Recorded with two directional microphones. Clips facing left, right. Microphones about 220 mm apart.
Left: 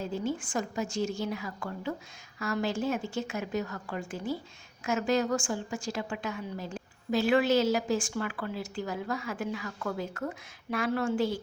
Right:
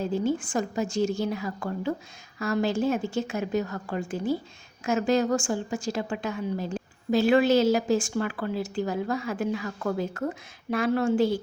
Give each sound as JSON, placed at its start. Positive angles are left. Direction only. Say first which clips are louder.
{"t": 0.0, "sound": "a woman's voice", "louder": "right 6 dB", "side_deg": -30}